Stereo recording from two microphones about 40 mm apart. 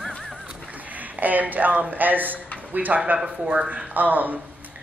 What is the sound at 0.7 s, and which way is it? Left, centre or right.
Speech, right.